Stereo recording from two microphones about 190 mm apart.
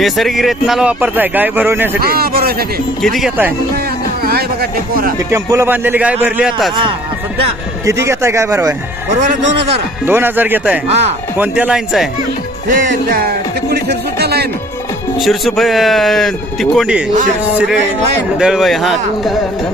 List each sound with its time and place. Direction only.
0.0 s a man's voice: centre (ahead or behind)
2.0 s speech: 50° right (ahead or behind)
3.0 s a man's voice: centre (ahead or behind)
4.2 s speech: 55° right (ahead or behind)
5.3 s a man's voice: 15° right (ahead or behind)
7.9 s a man's voice: 15° right (ahead or behind)
10.1 s a man's voice: 10° right (ahead or behind)
12.6 s speech: 45° right (ahead or behind)
15.2 s a man's voice: centre (ahead or behind)
18.3 s a man's voice: 5° right (ahead or behind)